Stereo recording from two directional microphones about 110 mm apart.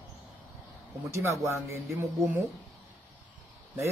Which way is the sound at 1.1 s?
25° right (ahead or behind).